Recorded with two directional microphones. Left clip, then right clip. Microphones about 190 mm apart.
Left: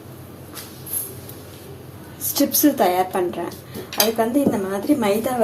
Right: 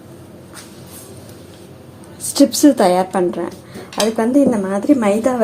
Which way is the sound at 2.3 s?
55° right (ahead or behind).